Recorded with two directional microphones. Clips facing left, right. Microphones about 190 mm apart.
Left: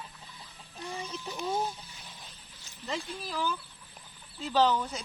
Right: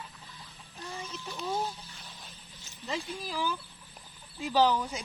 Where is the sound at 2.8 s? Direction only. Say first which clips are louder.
Even; 10° right (ahead or behind).